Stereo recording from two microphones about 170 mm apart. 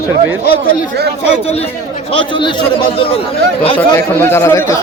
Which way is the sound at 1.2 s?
35° left (ahead or behind).